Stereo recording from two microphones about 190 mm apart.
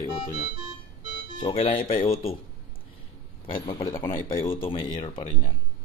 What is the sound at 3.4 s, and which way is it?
Speech, 25° left (ahead or behind).